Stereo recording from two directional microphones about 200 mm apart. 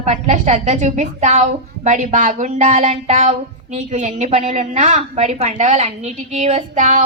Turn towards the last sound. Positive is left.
turn(degrees=-35)  # may be behind; listen again after turning